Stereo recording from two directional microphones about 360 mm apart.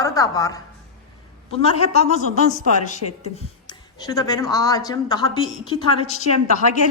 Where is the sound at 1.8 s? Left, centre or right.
Centre.